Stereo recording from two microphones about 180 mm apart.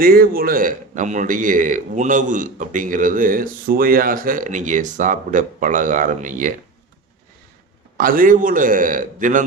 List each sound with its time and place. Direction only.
0.0 s a man's voice: 55° right (ahead or behind)
7.9 s a man's voice: 50° right (ahead or behind)